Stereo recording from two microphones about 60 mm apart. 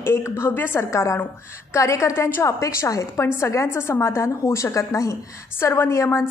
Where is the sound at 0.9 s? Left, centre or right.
Left.